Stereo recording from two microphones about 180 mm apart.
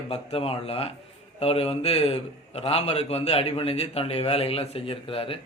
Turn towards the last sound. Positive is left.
turn(degrees=30)  # may be behind; listen again after turning